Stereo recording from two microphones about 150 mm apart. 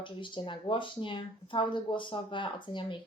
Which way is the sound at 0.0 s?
35° left (ahead or behind).